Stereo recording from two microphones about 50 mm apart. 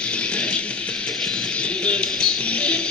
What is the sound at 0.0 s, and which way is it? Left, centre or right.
Music, left.